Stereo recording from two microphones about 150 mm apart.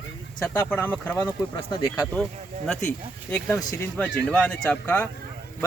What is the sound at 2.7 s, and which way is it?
Speech, 5° left (ahead or behind).